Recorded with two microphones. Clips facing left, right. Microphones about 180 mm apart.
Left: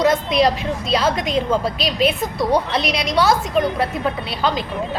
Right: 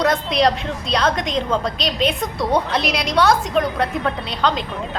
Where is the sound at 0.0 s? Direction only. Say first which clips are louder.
Left 1 dB; centre (ahead or behind).